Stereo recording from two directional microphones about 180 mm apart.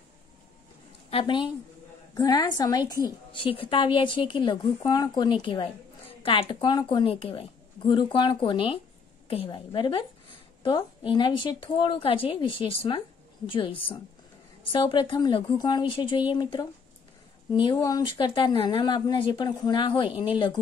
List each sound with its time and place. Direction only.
1.1 s a woman's voice: 25° left (ahead or behind)